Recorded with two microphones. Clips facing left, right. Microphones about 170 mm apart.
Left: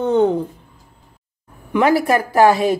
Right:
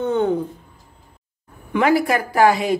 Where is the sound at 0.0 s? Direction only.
30° left (ahead or behind).